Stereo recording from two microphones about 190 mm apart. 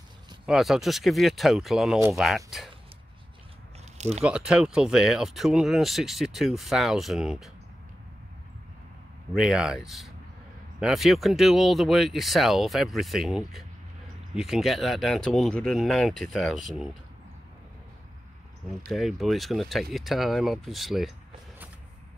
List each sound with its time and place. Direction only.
0.5 s speech: centre (ahead or behind)
4.2 s speech: 5° right (ahead or behind)
9.3 s speech: 5° right (ahead or behind)
18.9 s speech: centre (ahead or behind)